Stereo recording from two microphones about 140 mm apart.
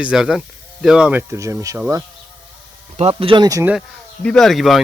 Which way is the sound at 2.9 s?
40° right (ahead or behind).